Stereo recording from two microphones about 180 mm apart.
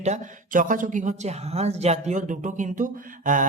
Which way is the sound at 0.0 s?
45° right (ahead or behind).